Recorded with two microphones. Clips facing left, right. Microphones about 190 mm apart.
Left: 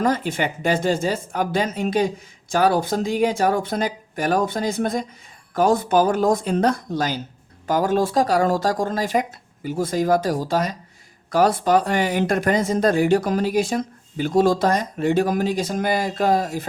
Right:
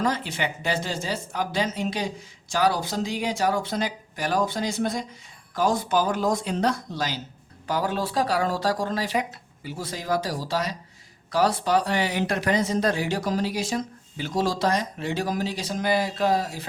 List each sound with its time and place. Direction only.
0.0 s speech: 50° left (ahead or behind)